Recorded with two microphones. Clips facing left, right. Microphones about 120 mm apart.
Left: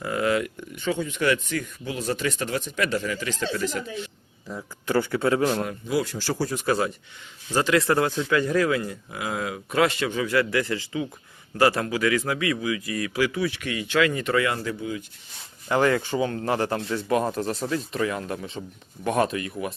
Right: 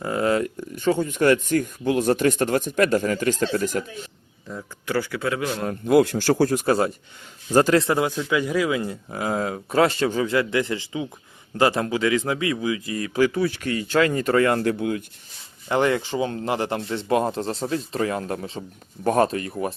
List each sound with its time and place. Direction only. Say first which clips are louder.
0.0 s speech: right 2 dB; 30° right (ahead or behind); by 4.1 s 45° right (ahead or behind)
4.4 s speech: left 1 dB; 20° left (ahead or behind)
5.8 s speech: right 9 dB; 60° right (ahead or behind)
6.7 s speech: right 3 dB; 45° right (ahead or behind)
7.9 s a man's voice: even; 15° right (ahead or behind)
8.8 s speech: right 4 dB; 25° right (ahead or behind); by 14.6 s 40° right (ahead or behind)
14.6 s speech: right 7 dB; 60° right (ahead or behind)
15.7 s speech: even; 25° right (ahead or behind)